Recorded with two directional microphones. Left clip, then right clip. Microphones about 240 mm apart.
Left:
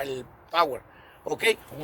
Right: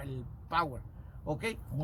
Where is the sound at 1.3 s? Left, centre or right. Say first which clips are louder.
Left 15 dB; left.